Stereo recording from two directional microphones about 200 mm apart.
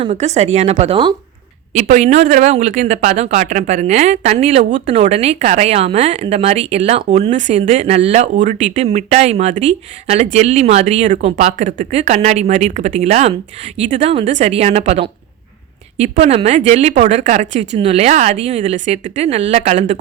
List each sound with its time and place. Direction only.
0.0 s speech: 35° right (ahead or behind)